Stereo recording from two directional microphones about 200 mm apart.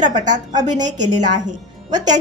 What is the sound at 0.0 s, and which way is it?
A woman's voice, 40° right (ahead or behind).